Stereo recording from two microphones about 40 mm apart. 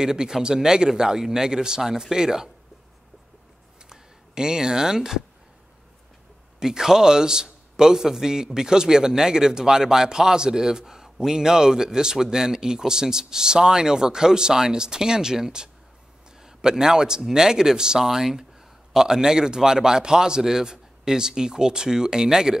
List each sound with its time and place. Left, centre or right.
0.0 s a man's voice: centre
3.9 s speech: centre
6.6 s a man's voice: centre